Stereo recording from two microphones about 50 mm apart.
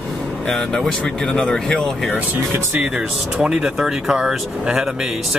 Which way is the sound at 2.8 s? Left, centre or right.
Centre.